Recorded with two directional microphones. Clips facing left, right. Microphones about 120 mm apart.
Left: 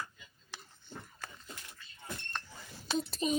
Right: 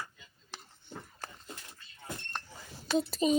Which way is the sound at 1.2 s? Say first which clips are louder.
Right 2 dB; 30° right (ahead or behind).